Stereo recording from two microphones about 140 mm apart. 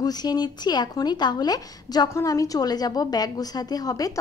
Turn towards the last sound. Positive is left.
turn(degrees=25)  # may be behind; listen again after turning